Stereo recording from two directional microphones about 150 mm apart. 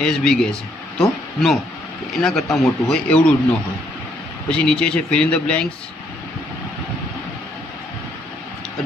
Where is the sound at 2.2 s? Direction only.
Centre (ahead or behind).